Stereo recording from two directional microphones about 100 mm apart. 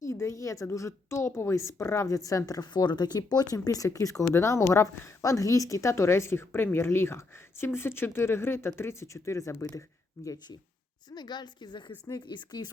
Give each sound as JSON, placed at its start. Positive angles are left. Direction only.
{"t": 0.0, "sound": "a woman's voice", "side_deg": 30}
{"t": 11.1, "sound": "a woman's voice", "side_deg": 45}